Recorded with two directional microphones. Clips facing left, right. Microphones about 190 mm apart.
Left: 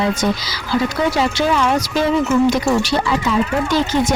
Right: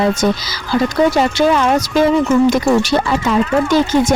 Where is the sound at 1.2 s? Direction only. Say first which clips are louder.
Right 4 dB; 45° right (ahead or behind).